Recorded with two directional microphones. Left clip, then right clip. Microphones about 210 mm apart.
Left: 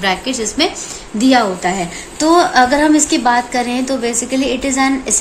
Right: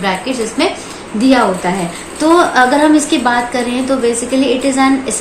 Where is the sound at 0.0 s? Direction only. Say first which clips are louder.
Right 1 dB; 50° left (ahead or behind).